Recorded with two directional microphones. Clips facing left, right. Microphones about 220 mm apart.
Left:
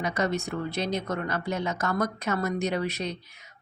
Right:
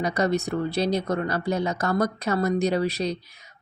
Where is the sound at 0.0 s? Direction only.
35° right (ahead or behind).